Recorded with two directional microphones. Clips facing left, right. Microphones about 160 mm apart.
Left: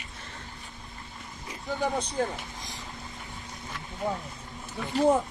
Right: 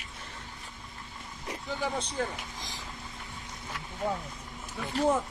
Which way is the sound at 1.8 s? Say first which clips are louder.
Left 5 dB; 40° left (ahead or behind).